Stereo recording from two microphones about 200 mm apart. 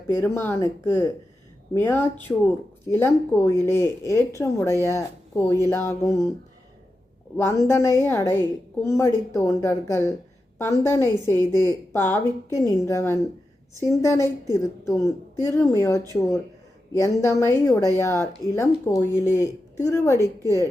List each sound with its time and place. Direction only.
0.1 s a woman's voice: 10° left (ahead or behind)
7.3 s a woman's voice: 15° left (ahead or behind)